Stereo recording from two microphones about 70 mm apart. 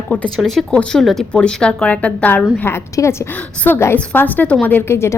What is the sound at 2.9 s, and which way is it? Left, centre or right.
Speech, left.